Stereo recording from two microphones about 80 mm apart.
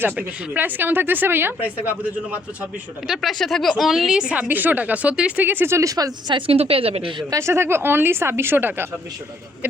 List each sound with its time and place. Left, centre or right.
0.0 s speech: right
3.2 s speech: centre
5.4 s speech: right
7.3 s speech: right